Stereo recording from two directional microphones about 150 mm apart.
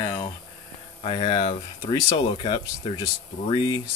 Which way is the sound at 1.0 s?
35° left (ahead or behind).